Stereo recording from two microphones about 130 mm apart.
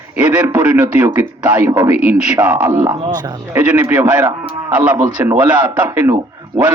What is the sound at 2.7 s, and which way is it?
Speech, 30° right (ahead or behind).